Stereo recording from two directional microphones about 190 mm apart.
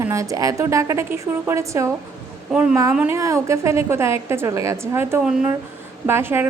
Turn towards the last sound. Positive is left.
turn(degrees=-10)  # may be behind; listen again after turning